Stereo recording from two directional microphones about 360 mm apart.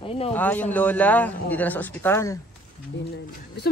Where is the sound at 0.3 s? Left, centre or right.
Centre.